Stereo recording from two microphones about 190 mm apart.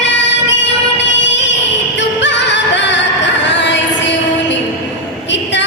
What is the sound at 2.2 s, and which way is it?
Music, 70° left (ahead or behind).